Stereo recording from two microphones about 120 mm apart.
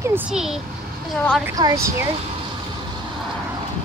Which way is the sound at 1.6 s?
30° right (ahead or behind).